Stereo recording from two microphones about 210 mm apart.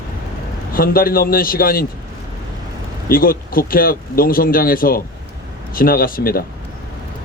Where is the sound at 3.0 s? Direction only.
45° left (ahead or behind).